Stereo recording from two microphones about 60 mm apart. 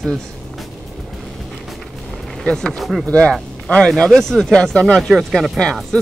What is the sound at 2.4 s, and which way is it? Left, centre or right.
Speech, centre.